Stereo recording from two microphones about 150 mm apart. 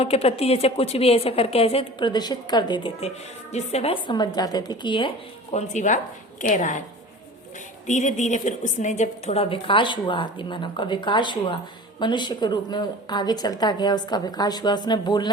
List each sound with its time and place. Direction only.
0.0 s a woman's voice: 45° left (ahead or behind)
3.5 s a woman's voice: 45° left (ahead or behind)
5.5 s a woman's voice: 55° left (ahead or behind)
7.9 s a woman's voice: 55° left (ahead or behind); by 15.3 s 30° left (ahead or behind)